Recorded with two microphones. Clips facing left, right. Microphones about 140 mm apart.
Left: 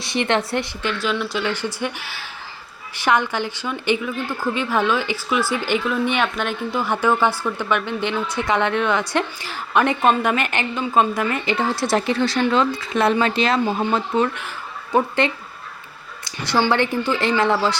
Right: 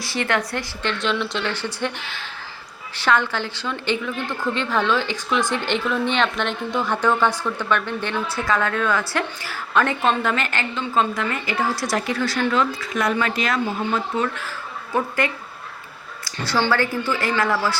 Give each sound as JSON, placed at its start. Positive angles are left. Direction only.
{"t": 0.0, "sound": "a woman's voice", "side_deg": 20}
{"t": 0.8, "sound": "a woman's voice", "side_deg": 5}